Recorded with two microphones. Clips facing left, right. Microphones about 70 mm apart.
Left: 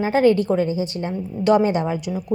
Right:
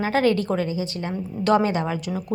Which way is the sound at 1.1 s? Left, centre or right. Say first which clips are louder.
Left 3 dB; centre.